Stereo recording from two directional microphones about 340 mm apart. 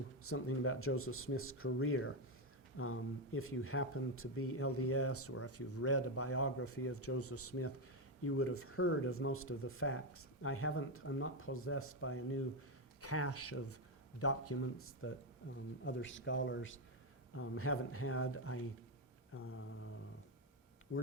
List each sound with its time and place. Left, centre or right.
0.2 s speech: left
20.9 s speech: left